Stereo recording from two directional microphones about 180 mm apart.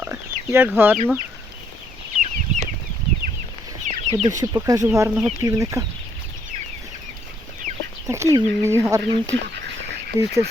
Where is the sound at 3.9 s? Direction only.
40° right (ahead or behind).